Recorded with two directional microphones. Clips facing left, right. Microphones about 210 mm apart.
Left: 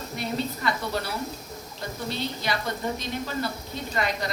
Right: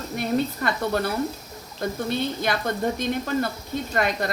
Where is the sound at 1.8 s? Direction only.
55° right (ahead or behind).